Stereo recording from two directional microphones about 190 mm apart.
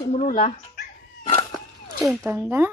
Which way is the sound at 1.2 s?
20° left (ahead or behind).